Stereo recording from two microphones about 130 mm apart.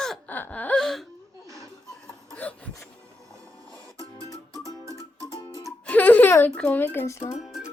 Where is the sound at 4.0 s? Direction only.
25° left (ahead or behind).